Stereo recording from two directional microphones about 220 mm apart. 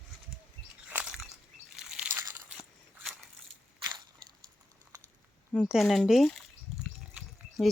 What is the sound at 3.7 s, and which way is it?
Crushing, 20° right (ahead or behind).